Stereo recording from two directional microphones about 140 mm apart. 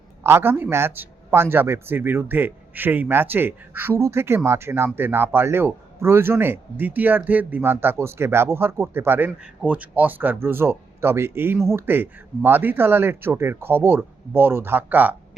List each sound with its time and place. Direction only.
0.2 s speech: 15° right (ahead or behind)